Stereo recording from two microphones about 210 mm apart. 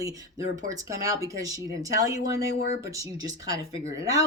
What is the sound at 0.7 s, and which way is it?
Speech, 15° right (ahead or behind).